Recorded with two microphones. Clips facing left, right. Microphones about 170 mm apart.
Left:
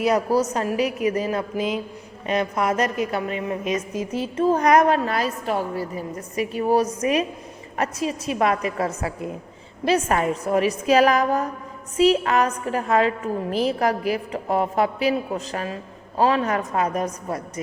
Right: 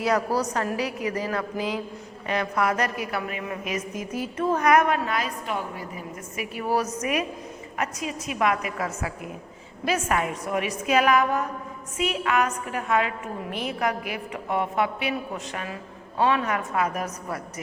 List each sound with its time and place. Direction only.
0.0 s a woman's voice: 20° left (ahead or behind)
8.3 s a woman's voice: 35° left (ahead or behind)